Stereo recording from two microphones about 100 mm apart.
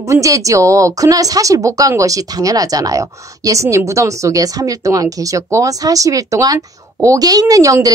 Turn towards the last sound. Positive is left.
turn(degrees=-35)  # may be behind; listen again after turning